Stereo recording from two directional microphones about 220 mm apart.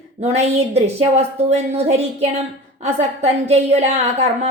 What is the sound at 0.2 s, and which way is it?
A woman's voice, 30° right (ahead or behind).